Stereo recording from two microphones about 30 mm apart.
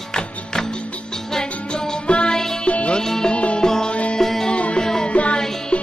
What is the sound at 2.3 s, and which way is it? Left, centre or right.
Music, centre.